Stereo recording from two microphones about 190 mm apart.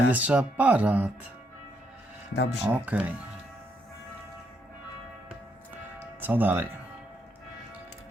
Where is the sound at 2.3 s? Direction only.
65° left (ahead or behind).